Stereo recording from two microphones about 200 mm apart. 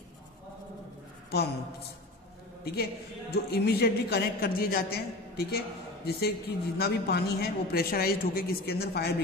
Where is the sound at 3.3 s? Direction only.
55° left (ahead or behind).